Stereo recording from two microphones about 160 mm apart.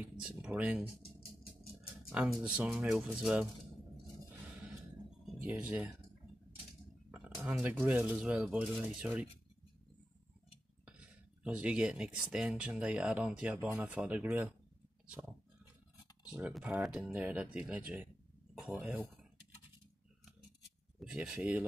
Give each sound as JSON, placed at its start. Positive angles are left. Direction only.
{"t": 0.2, "sound": "speech", "side_deg": -5}
{"t": 2.1, "sound": "speech", "side_deg": -5}
{"t": 5.2, "sound": "speech", "side_deg": -10}
{"t": 7.1, "sound": "speech", "side_deg": -10}
{"t": 10.9, "sound": "speech", "side_deg": -5}
{"t": 16.3, "sound": "speech", "side_deg": -10}
{"t": 21.0, "sound": "speech", "side_deg": -5}